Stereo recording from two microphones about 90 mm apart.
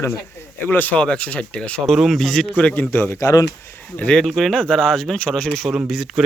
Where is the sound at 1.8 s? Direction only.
Centre (ahead or behind).